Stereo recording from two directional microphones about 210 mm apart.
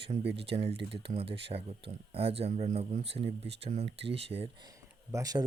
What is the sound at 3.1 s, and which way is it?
Speech, 55° right (ahead or behind).